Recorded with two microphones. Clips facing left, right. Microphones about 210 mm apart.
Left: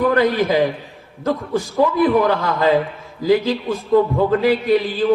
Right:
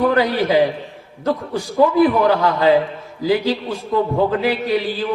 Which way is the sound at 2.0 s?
45° left (ahead or behind).